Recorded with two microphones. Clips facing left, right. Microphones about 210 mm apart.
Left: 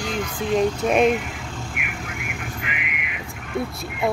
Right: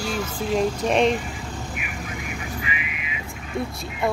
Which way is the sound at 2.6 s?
65° left (ahead or behind).